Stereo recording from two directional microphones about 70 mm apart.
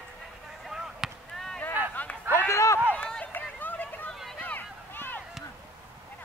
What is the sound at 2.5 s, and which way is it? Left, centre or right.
Run, left.